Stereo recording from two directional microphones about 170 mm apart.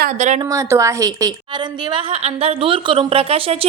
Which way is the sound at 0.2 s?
45° right (ahead or behind).